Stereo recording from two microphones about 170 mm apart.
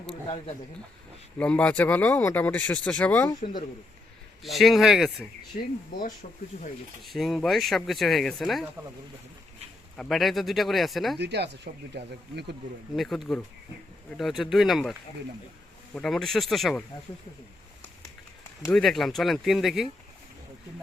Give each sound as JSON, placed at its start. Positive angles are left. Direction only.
{"t": 1.4, "sound": "speech", "side_deg": 5}
{"t": 4.4, "sound": "speech", "side_deg": 0}
{"t": 5.5, "sound": "speech", "side_deg": 50}
{"t": 7.0, "sound": "speech", "side_deg": 0}
{"t": 10.0, "sound": "speech", "side_deg": 0}
{"t": 11.2, "sound": "speech", "side_deg": -80}
{"t": 13.0, "sound": "speech", "side_deg": 0}
{"t": 16.0, "sound": "speech", "side_deg": 0}
{"t": 18.7, "sound": "speech", "side_deg": 0}